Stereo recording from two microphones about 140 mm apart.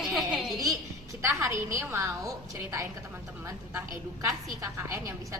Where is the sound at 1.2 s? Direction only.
20° right (ahead or behind).